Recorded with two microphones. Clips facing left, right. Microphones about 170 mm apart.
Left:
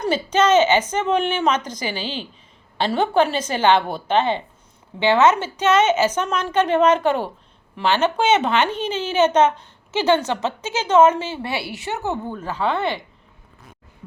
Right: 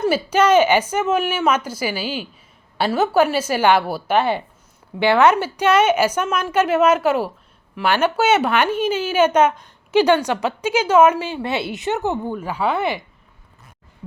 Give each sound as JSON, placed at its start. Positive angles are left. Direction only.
{"t": 0.0, "sound": "a woman's voice", "side_deg": -10}